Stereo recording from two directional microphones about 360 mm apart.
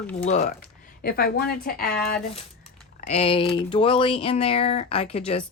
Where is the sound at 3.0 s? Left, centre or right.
Centre.